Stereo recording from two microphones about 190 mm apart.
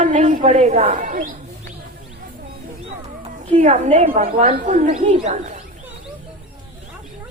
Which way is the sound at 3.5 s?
35° right (ahead or behind).